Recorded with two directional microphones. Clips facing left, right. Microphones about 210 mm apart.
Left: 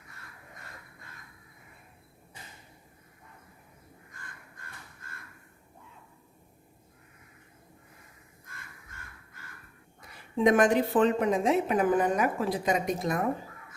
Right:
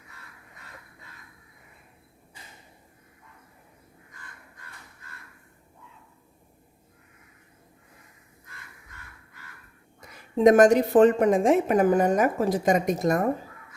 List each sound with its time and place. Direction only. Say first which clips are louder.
10.3 s a woman's voice: right 6 dB; 40° right (ahead or behind)